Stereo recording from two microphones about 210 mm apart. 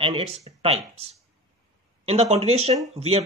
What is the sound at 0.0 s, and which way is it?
Speech, 30° right (ahead or behind).